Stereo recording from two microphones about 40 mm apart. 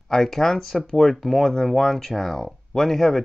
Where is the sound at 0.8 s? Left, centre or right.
Left.